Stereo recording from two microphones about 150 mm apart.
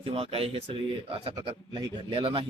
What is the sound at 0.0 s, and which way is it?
Speech, 40° right (ahead or behind).